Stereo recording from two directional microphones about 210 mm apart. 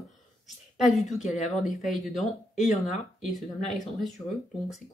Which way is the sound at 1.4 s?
Centre (ahead or behind).